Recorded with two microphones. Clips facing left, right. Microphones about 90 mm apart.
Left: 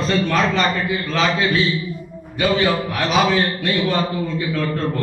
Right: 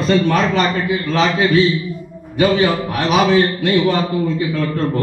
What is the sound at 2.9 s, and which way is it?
Speech, 60° right (ahead or behind).